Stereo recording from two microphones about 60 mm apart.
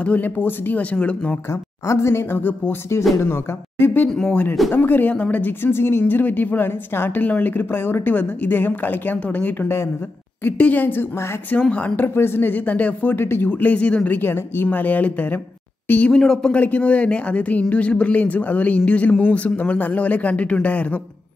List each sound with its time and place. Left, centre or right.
0.0 s speech: left
0.4 s a woman's voice: left
0.9 s speech: left
1.5 s a woman's voice: left
4.1 s speech: centre
4.7 s a woman's voice: left
5.1 s a woman's voice: left
12.0 s a woman's voice: left
13.1 s a woman's voice: left
13.5 s speech: left
14.2 s a woman's voice: left
16.1 s speech: centre
16.5 s speech: left